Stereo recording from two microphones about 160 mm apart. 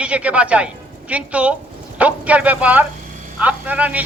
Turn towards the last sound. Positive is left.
turn(degrees=-10)  # may be behind; listen again after turning